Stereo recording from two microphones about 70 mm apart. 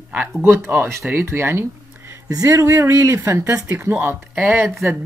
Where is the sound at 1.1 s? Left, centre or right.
Right.